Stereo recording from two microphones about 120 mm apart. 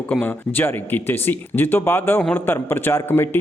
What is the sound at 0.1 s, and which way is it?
Speech, 15° left (ahead or behind).